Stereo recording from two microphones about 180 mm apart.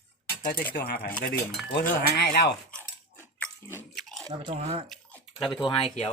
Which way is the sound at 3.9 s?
Centre (ahead or behind).